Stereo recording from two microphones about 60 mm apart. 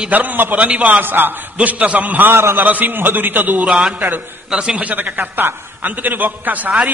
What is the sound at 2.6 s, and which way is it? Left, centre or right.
A man's voice, right.